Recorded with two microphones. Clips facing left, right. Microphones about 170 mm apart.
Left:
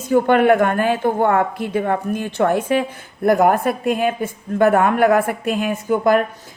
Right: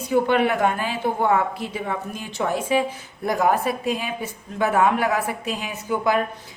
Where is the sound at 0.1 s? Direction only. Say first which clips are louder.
Left 6 dB; 55° left (ahead or behind).